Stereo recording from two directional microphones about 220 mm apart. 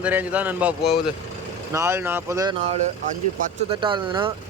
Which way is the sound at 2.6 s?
30° right (ahead or behind).